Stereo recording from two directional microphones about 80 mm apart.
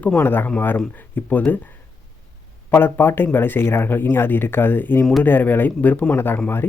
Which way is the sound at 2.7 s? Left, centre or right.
Left.